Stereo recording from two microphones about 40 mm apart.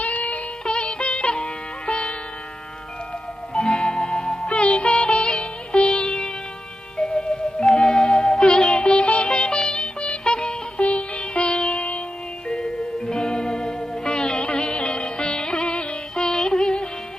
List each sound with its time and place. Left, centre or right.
0.0 s music: left
0.6 s music: left
3.5 s music: left
9.3 s music: left
12.5 s music: left